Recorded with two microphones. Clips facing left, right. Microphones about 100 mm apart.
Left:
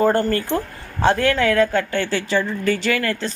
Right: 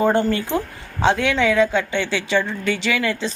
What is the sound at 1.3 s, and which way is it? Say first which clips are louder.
Speech: even; centre (ahead or behind).